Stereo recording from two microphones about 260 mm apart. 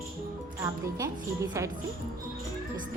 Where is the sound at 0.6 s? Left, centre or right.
Centre.